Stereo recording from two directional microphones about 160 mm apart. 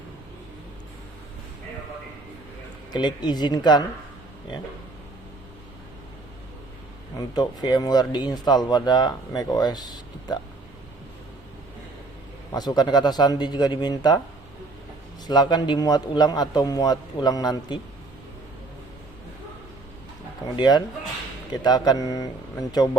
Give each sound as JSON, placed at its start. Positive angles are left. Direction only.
{"t": 2.9, "sound": "speech", "side_deg": 25}
{"t": 7.3, "sound": "speech", "side_deg": 25}
{"t": 12.5, "sound": "speech", "side_deg": 25}
{"t": 15.3, "sound": "speech", "side_deg": 25}
{"t": 20.6, "sound": "speech", "side_deg": 25}